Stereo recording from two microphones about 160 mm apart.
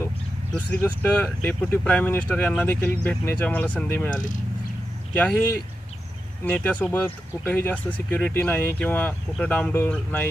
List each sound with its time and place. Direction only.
0.6 s speech: 10° left (ahead or behind)
5.1 s speech: 10° left (ahead or behind)